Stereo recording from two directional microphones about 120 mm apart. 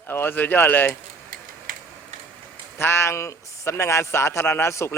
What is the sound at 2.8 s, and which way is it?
A man's voice, 20° left (ahead or behind).